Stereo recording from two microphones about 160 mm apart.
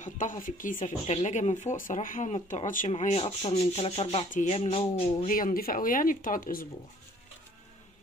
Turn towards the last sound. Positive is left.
turn(degrees=60)  # may be behind; listen again after turning